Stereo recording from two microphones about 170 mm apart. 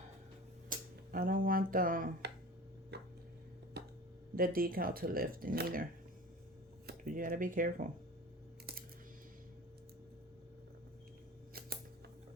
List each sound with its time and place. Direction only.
0.7 s speech: 55° right (ahead or behind)
2.9 s a sound: 75° right (ahead or behind)
4.4 s speech: 60° right (ahead or behind)